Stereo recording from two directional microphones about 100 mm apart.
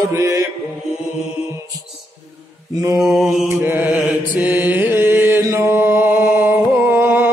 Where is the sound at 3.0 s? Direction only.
5° right (ahead or behind).